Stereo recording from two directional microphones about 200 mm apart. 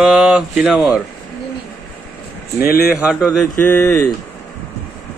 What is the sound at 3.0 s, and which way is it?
Speech, 5° right (ahead or behind).